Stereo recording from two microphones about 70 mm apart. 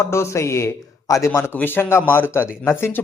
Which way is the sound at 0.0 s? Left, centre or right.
Left.